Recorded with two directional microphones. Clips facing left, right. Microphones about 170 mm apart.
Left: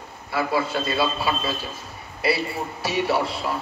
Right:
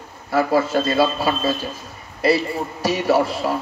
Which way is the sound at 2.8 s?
40° right (ahead or behind).